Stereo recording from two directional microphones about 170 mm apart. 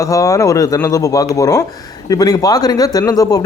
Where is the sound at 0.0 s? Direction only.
20° left (ahead or behind).